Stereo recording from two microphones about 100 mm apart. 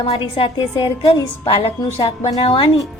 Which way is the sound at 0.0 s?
70° left (ahead or behind).